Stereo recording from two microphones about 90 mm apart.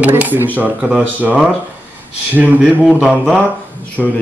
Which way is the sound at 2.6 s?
5° right (ahead or behind).